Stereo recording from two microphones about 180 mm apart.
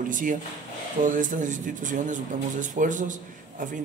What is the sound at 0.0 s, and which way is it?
Speech, 50° right (ahead or behind).